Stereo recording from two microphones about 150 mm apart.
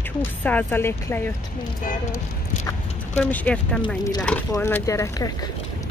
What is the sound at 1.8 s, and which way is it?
Speech, 60° left (ahead or behind).